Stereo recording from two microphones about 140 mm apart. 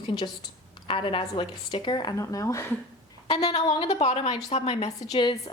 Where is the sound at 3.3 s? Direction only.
45° left (ahead or behind).